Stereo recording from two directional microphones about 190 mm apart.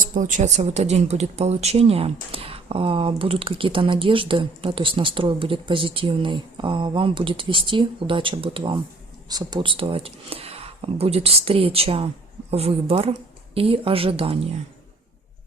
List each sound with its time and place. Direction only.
0.1 s speech: 40° right (ahead or behind)